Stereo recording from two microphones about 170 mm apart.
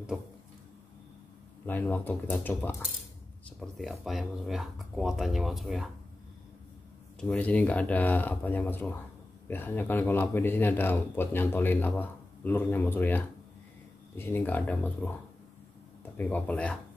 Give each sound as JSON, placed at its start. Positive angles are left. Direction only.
{"t": 1.7, "sound": "speech", "side_deg": 10}
{"t": 7.2, "sound": "speech", "side_deg": 5}
{"t": 16.2, "sound": "speech", "side_deg": 10}